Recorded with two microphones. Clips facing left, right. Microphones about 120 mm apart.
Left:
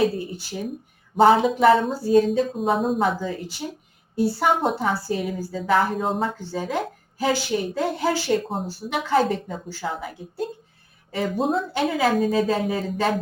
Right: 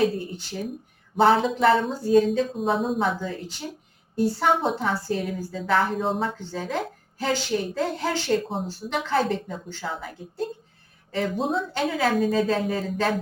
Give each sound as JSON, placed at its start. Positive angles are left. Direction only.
{"t": 0.0, "sound": "a woman's voice", "side_deg": 5}